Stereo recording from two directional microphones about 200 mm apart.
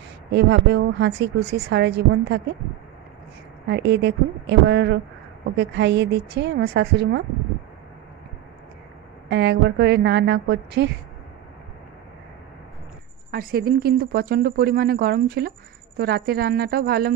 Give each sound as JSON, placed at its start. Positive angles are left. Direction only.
{"t": 0.3, "sound": "a woman's voice", "side_deg": -60}
{"t": 3.6, "sound": "a woman's voice", "side_deg": -60}
{"t": 9.3, "sound": "a woman's voice", "side_deg": -60}
{"t": 13.3, "sound": "speech", "side_deg": -50}